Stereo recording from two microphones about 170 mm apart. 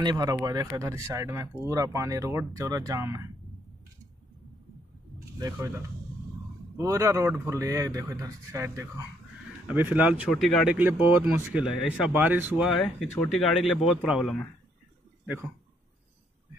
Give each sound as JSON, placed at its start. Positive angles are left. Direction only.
{"t": 0.0, "sound": "speech", "side_deg": -25}
{"t": 5.4, "sound": "a man's voice", "side_deg": -20}
{"t": 12.8, "sound": "speech", "side_deg": 10}
{"t": 13.8, "sound": "speech", "side_deg": -5}